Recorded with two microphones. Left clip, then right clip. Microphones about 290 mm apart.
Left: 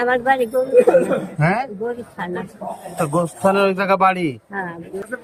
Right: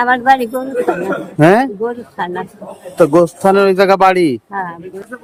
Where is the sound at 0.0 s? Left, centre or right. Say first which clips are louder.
Right 6 dB; centre.